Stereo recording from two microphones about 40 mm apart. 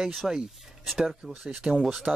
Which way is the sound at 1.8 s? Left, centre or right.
Centre.